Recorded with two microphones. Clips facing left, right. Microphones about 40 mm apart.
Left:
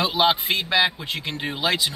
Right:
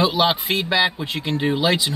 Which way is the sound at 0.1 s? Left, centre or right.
Centre.